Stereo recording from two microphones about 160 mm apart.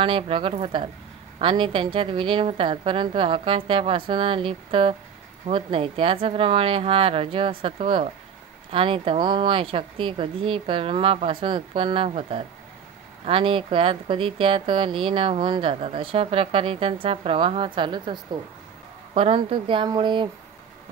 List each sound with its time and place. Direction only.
0.0 s speech: 35° right (ahead or behind)